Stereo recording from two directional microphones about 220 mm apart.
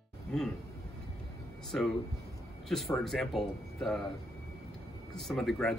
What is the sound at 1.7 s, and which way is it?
Speech, 5° left (ahead or behind).